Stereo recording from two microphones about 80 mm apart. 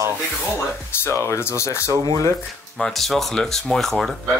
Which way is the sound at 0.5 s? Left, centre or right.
Left.